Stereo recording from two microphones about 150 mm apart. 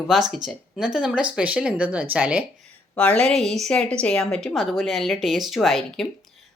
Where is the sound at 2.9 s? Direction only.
10° left (ahead or behind).